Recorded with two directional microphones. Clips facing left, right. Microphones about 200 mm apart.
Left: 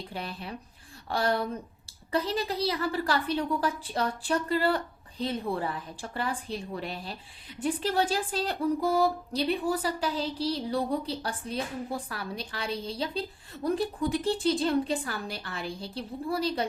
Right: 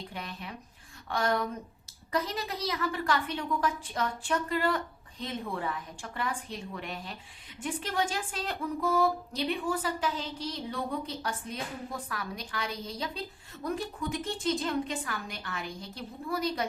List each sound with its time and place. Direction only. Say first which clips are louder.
0.1 s speech: left 4 dB; 30° left (ahead or behind)